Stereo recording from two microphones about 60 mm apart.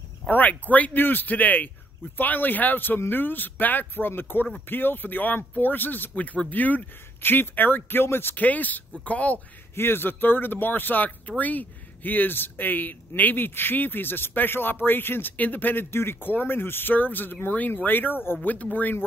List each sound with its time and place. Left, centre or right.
0.3 s speech: left
9.8 s speech: left